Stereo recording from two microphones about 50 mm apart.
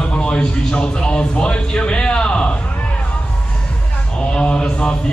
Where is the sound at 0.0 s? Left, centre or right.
Left.